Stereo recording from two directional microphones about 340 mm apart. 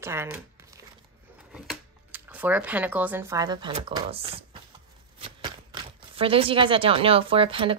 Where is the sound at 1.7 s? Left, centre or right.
Centre.